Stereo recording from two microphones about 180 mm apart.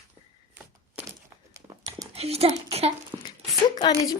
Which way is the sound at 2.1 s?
35° right (ahead or behind).